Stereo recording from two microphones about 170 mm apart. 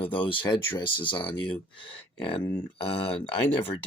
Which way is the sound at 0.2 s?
30° left (ahead or behind).